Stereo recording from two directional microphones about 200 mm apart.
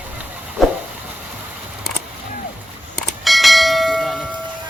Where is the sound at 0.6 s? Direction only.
Centre (ahead or behind).